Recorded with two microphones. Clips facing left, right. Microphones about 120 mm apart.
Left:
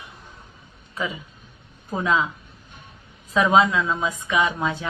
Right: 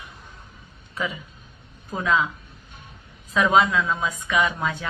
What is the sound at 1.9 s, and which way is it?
Speech, 25° left (ahead or behind).